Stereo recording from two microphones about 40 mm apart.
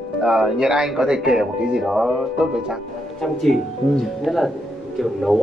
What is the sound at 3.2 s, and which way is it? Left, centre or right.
Speech, centre.